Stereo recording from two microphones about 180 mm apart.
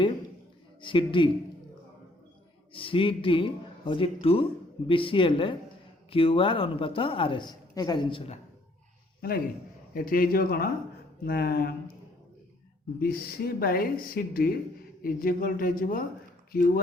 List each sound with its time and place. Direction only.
0.8 s speech: 25° left (ahead or behind)
2.7 s speech: 30° left (ahead or behind)
9.9 s speech: 50° left (ahead or behind)
13.0 s speech: 55° left (ahead or behind)